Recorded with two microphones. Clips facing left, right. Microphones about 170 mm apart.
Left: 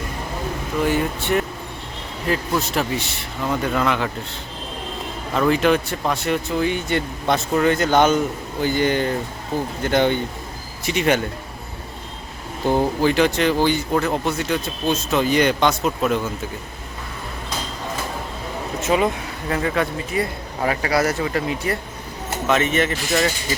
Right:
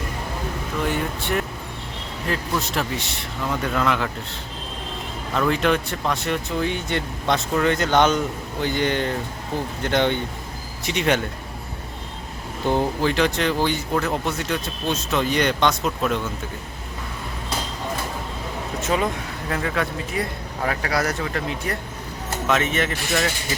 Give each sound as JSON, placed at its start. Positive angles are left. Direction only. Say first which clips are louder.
{"t": 0.8, "sound": "speech", "louder": "left 5 dB", "side_deg": 0}
{"t": 12.6, "sound": "speech", "louder": "left 3 dB", "side_deg": 5}
{"t": 18.9, "sound": "speech", "louder": "left 4 dB", "side_deg": 5}